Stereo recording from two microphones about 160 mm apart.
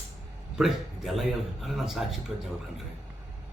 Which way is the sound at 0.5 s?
Centre (ahead or behind).